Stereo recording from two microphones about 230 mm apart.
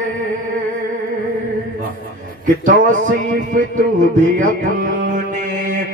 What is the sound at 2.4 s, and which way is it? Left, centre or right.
Music, right.